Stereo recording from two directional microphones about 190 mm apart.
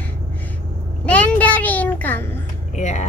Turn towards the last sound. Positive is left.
turn(degrees=40)  # may be behind; listen again after turning